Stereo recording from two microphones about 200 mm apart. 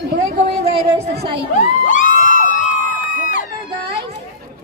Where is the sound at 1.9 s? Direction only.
40° left (ahead or behind).